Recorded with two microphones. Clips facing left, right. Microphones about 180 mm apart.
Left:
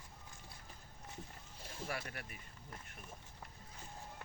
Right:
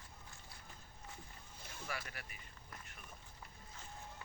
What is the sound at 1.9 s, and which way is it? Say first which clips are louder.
Speech: left 2 dB; 50° left (ahead or behind).